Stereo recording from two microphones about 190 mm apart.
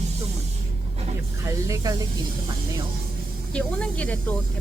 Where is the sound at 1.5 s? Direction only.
15° right (ahead or behind).